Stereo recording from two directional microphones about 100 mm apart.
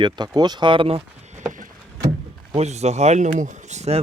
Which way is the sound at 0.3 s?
45° right (ahead or behind).